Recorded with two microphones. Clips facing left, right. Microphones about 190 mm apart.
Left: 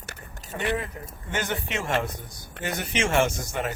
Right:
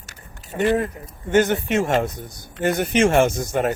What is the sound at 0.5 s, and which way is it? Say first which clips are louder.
Speech: right 8 dB; 50° right (ahead or behind).